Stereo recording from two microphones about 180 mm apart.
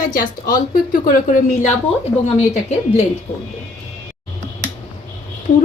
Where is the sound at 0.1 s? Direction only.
50° left (ahead or behind).